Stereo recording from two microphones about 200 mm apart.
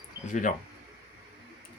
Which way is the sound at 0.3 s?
40° left (ahead or behind).